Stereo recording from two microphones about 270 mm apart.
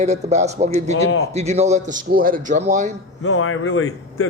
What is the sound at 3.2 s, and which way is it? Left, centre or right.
Speech, left.